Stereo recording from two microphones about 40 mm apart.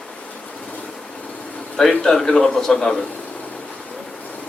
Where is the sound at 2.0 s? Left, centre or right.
Centre.